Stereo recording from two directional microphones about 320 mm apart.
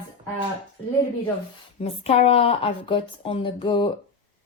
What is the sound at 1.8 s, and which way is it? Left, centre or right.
A woman's voice, centre.